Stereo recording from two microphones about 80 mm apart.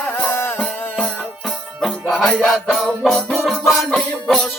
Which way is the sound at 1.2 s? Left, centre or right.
Centre.